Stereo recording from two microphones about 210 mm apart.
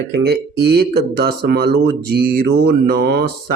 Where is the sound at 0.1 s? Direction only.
50° right (ahead or behind).